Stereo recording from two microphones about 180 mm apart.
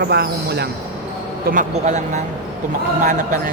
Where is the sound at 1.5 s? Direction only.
40° right (ahead or behind).